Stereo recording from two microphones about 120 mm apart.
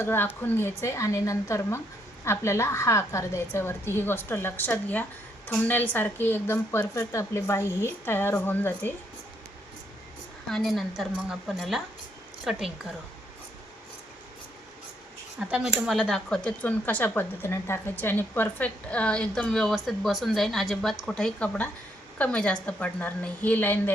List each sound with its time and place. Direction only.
0.0 s a woman's voice: 20° left (ahead or behind)
10.5 s speech: centre (ahead or behind)
15.4 s a woman's voice: 10° right (ahead or behind); by 23.9 s 15° left (ahead or behind)